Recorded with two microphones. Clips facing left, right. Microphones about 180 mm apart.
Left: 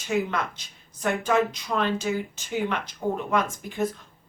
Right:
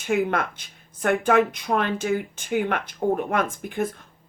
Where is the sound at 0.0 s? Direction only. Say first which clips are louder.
Right 3 dB; 55° right (ahead or behind).